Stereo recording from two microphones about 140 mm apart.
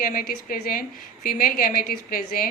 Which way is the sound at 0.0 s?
90° left.